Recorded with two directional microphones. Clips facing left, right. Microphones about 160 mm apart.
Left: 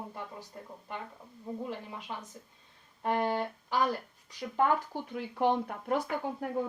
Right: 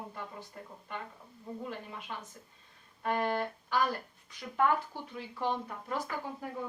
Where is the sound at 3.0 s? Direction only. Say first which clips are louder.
Left 2 dB; 25° left (ahead or behind).